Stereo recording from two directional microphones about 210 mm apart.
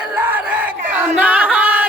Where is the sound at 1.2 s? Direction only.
5° right (ahead or behind).